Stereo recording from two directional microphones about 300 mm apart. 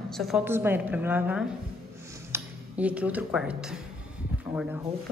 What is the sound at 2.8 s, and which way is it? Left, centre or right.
Speech, centre.